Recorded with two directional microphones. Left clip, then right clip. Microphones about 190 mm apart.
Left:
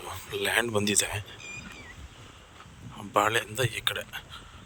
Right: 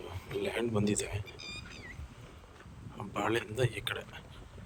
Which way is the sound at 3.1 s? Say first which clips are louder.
Left 8 dB; 10° right (ahead or behind).